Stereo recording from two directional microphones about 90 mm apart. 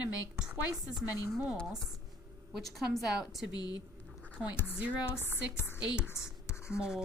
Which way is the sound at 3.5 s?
50° left (ahead or behind).